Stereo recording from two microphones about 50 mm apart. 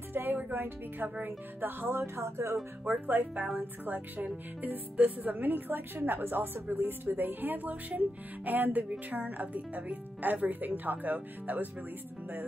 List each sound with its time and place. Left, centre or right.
0.1 s music: right
0.5 s a woman's voice: right
2.0 s speech: right
2.9 s a woman's voice: right